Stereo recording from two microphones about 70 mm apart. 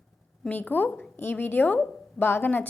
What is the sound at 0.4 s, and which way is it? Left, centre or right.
A woman's voice, left.